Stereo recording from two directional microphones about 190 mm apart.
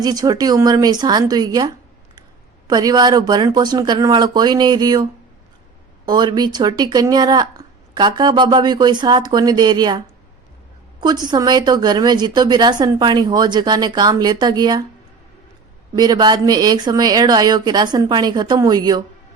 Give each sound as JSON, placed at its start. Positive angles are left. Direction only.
{"t": 0.0, "sound": "speech", "side_deg": -20}
{"t": 6.1, "sound": "speech", "side_deg": -20}
{"t": 11.0, "sound": "speech", "side_deg": -20}
{"t": 16.0, "sound": "speech", "side_deg": -20}